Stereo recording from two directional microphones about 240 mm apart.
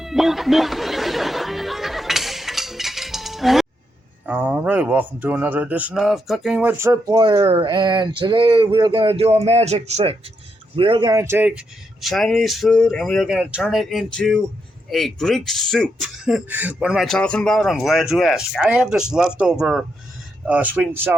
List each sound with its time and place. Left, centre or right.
0.0 s chatter: centre
4.3 s speech: centre